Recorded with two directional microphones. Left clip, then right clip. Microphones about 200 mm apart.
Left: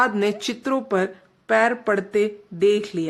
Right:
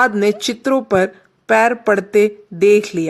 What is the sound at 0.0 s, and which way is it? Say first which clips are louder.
Speech: right 6 dB; 25° right (ahead or behind).